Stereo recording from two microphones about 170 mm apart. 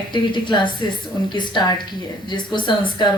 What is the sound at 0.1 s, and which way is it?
A woman's voice, 25° left (ahead or behind).